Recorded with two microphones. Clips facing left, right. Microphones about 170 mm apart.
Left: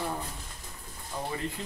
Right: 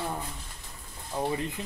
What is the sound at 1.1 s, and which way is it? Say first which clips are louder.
Speech: right 4 dB; 20° right (ahead or behind).